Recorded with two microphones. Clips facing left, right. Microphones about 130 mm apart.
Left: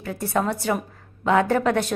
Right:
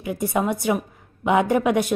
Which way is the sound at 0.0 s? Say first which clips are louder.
Right 1 dB; 15° right (ahead or behind).